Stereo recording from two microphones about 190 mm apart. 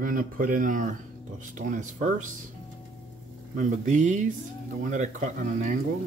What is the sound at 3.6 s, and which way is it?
Speech, 40° right (ahead or behind).